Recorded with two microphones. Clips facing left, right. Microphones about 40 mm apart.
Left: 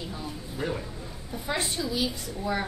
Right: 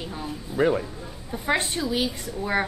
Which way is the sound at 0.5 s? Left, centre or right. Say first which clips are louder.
Right 11 dB; right.